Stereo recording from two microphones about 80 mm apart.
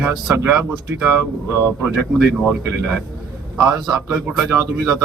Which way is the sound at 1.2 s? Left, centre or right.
Right.